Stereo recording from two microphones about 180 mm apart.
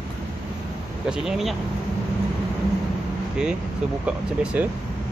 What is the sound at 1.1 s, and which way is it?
Speech, 5° right (ahead or behind).